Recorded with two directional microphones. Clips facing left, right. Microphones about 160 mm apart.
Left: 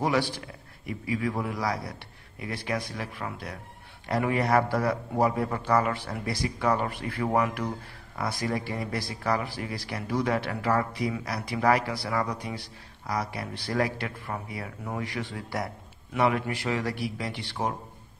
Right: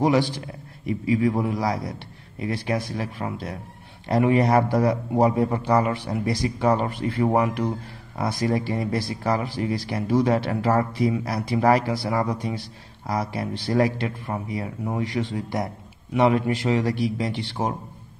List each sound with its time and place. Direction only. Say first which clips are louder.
0.0 s a man's voice: right 6 dB; 20° right (ahead or behind)